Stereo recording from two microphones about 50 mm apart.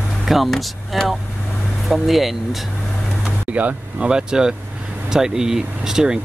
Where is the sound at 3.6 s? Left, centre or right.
Right.